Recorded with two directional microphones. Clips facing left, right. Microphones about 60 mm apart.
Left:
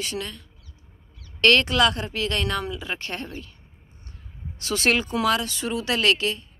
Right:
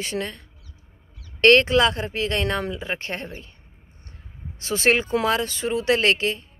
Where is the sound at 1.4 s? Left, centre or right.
Right.